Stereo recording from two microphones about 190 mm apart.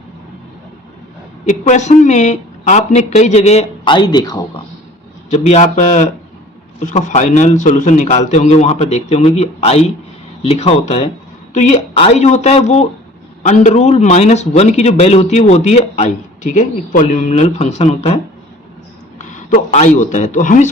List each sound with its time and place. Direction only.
1.5 s speech: 40° left (ahead or behind); by 4.4 s 20° left (ahead or behind)
5.3 s speech: 35° left (ahead or behind)
19.2 s a man's voice: 45° left (ahead or behind)